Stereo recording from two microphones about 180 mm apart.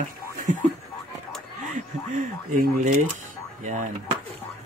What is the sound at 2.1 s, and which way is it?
Speech, 45° right (ahead or behind).